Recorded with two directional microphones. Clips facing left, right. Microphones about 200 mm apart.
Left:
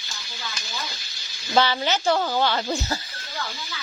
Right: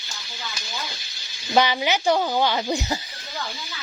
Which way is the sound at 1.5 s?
15° right (ahead or behind).